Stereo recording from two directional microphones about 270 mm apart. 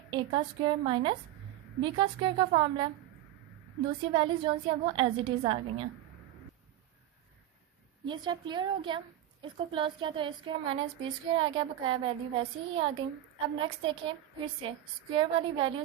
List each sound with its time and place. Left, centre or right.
0.1 s a woman's voice: centre
4.0 s a woman's voice: centre
8.0 s a woman's voice: centre